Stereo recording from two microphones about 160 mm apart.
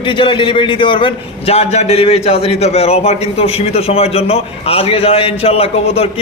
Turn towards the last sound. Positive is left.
turn(degrees=40)  # may be behind; listen again after turning